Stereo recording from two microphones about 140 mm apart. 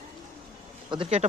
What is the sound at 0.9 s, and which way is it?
Speech, 35° right (ahead or behind).